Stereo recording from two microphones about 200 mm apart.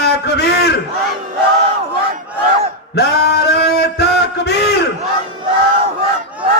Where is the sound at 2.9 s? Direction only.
55° left (ahead or behind).